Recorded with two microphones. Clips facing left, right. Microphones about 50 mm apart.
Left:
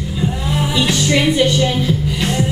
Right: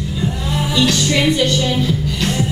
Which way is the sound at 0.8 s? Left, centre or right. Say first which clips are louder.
Right 1 dB; centre.